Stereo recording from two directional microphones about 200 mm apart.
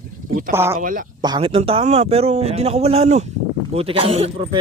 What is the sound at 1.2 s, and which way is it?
A man's voice, 25° right (ahead or behind).